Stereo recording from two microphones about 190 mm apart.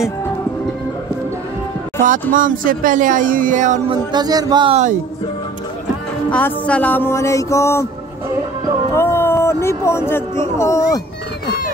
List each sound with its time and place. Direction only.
2.0 s speech: 45° right (ahead or behind)
3.9 s speech: 20° right (ahead or behind)
6.3 s a sound: 5° left (ahead or behind)
8.9 s speech: 15° left (ahead or behind)